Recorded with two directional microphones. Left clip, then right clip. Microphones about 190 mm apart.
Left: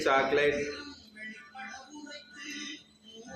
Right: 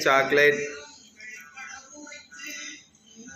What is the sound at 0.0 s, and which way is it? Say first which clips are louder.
Speech: right 6 dB; 25° right (ahead or behind).